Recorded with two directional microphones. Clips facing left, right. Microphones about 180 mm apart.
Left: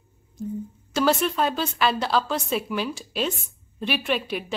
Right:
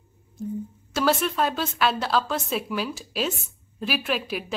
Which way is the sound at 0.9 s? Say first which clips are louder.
Left 1 dB; centre (ahead or behind).